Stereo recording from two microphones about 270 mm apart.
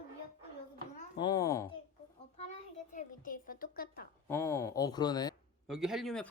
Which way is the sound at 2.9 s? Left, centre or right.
Left.